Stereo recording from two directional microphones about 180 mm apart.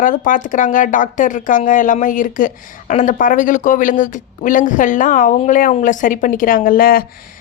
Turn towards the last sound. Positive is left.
turn(degrees=55)  # may be behind; listen again after turning